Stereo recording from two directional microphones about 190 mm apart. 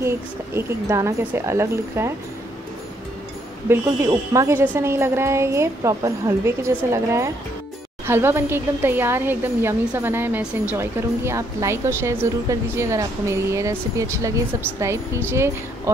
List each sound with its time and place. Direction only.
0.0 s speech: 15° right (ahead or behind)
3.6 s speech: 10° right (ahead or behind)